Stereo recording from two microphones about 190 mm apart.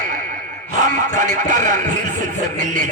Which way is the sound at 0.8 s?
40° right (ahead or behind).